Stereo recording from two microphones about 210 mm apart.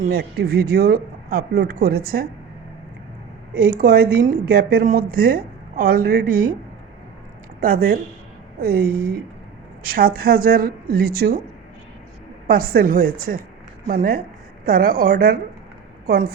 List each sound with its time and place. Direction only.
0.0 s a woman's voice: 50° right (ahead or behind)
3.8 s a woman's voice: 45° right (ahead or behind)
7.6 s a woman's voice: 45° right (ahead or behind)
12.5 s a woman's voice: 45° right (ahead or behind)